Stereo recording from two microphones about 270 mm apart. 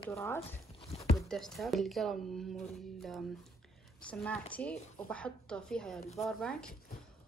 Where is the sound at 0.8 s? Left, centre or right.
Left.